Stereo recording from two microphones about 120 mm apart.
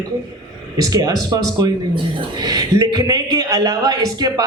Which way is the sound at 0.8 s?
30° right (ahead or behind).